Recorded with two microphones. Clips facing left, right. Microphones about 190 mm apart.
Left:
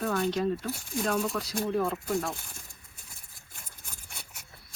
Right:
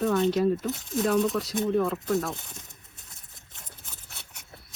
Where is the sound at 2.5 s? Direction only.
20° right (ahead or behind).